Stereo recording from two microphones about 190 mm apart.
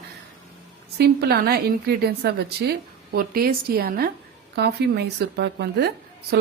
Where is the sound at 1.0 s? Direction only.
60° right (ahead or behind).